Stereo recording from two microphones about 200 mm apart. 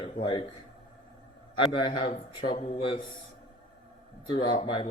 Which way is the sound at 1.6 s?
30° left (ahead or behind).